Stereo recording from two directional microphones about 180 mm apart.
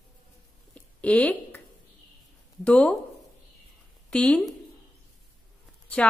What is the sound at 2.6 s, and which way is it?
Speech, 5° left (ahead or behind).